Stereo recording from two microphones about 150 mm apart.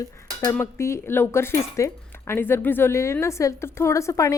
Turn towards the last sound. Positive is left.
turn(degrees=20)  # may be behind; listen again after turning